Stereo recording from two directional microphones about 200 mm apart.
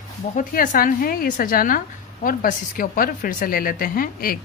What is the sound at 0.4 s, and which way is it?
A woman's voice, 45° left (ahead or behind).